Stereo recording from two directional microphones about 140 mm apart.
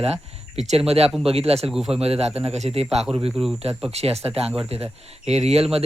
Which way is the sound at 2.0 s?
45° right (ahead or behind).